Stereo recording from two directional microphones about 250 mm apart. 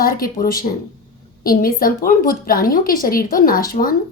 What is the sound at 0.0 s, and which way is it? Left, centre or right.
Speech, left.